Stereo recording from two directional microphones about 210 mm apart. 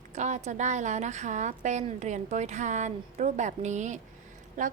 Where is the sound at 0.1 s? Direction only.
35° right (ahead or behind).